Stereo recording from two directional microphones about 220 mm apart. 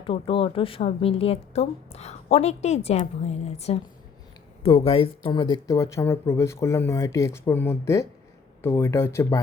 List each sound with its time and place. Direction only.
0.0 s speech: 25° left (ahead or behind)